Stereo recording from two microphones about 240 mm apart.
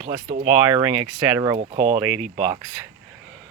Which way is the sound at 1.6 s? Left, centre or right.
Right.